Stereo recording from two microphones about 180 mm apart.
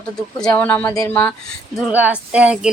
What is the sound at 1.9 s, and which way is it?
Speech, 5° right (ahead or behind).